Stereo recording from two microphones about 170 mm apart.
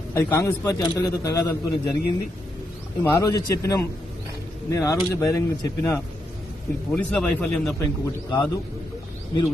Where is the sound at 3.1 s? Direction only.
20° left (ahead or behind).